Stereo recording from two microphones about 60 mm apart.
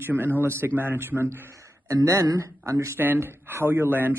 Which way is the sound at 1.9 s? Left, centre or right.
Right.